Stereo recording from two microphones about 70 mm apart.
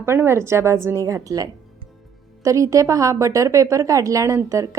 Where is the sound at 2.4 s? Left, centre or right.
Right.